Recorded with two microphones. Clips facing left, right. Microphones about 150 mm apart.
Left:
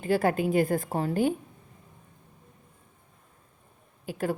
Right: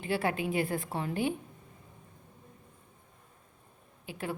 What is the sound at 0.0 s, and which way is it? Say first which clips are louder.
A woman's voice: left 6 dB; 40° left (ahead or behind).